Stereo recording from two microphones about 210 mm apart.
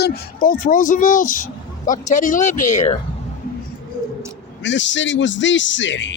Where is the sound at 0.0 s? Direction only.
40° left (ahead or behind).